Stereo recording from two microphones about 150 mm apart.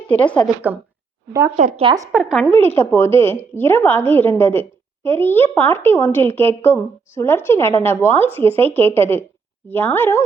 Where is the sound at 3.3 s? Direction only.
15° left (ahead or behind).